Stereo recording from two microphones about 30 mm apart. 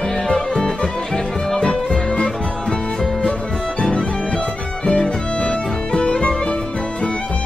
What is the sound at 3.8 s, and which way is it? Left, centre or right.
Music, left.